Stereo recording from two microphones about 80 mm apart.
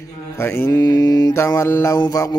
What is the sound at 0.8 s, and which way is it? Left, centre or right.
Mantra, left.